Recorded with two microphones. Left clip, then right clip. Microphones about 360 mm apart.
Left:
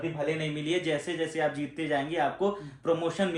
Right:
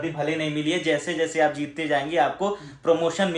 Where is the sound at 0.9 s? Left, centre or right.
Right.